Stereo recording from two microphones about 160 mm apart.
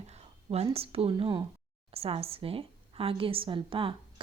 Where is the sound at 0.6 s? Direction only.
35° right (ahead or behind).